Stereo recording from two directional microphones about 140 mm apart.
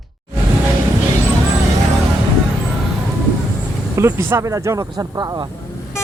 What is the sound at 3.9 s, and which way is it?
Speech, 20° right (ahead or behind).